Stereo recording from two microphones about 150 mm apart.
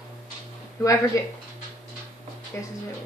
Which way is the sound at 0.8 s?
20° left (ahead or behind).